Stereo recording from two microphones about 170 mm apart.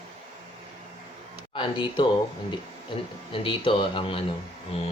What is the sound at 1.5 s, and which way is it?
Speech, 30° left (ahead or behind).